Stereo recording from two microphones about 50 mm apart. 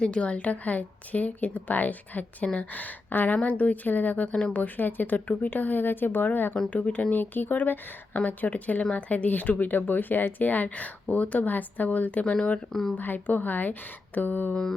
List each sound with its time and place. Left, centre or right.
0.0 s speech: left
12.2 s speech: centre
13.0 s speech: left
14.5 s mantra: centre